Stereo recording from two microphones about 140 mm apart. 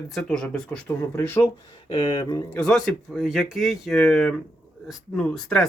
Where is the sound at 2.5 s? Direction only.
5° left (ahead or behind).